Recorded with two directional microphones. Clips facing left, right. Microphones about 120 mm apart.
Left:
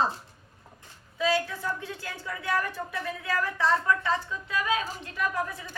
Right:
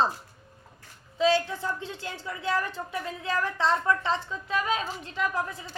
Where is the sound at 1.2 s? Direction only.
25° right (ahead or behind).